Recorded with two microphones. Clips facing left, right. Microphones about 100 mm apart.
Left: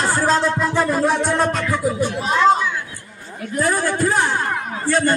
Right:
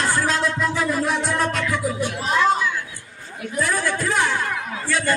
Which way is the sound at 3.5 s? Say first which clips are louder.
Left 3 dB; 35° left (ahead or behind).